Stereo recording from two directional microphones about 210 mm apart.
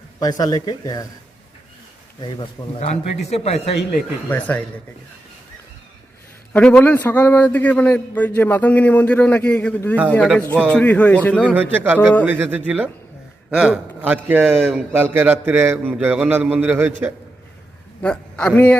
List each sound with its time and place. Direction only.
0.2 s a man's voice: 20° left (ahead or behind)
2.2 s a man's voice: 25° left (ahead or behind)
4.3 s a man's voice: 10° left (ahead or behind)
6.5 s a man's voice: 5° left (ahead or behind)
11.5 s a man's voice: 10° right (ahead or behind)
18.0 s a man's voice: 5° left (ahead or behind)